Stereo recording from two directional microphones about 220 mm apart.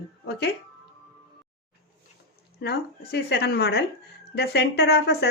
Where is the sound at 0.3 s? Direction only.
45° left (ahead or behind).